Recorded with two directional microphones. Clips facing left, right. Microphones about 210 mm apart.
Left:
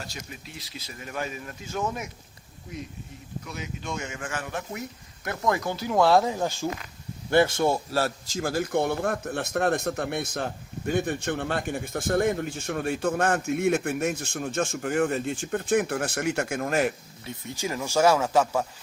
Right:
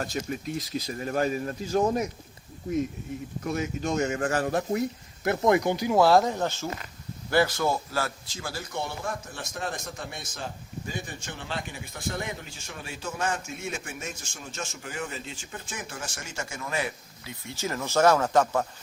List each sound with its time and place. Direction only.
0.0 s speech: 50° right (ahead or behind)
3.4 s speech: 45° right (ahead or behind)
5.2 s speech: 25° right (ahead or behind); by 6.7 s 10° left (ahead or behind)
7.3 s a man's voice: 25° left (ahead or behind)
8.4 s a man's voice: 50° left (ahead or behind)
17.5 s speech: 15° left (ahead or behind)